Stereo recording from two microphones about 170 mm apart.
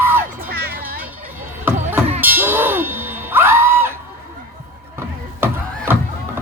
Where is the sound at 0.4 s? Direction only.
60° right (ahead or behind).